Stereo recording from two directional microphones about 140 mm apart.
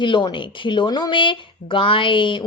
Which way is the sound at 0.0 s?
35° left (ahead or behind).